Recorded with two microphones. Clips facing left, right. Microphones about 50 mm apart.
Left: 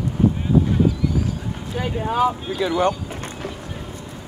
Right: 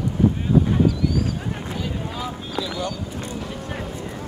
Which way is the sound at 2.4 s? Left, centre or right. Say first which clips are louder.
Left 7 dB; left.